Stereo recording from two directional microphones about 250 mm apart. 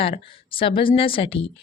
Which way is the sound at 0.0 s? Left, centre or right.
Left.